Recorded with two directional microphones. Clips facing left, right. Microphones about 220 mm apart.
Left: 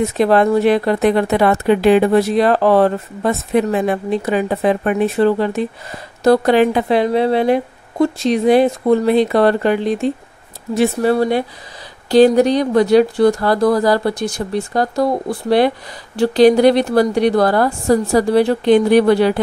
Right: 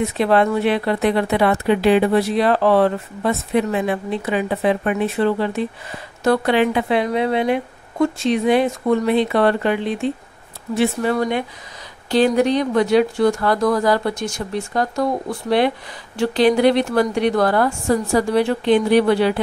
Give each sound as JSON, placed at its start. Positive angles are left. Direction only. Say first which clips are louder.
{"t": 0.0, "sound": "speech", "louder": "left 3 dB", "side_deg": 40}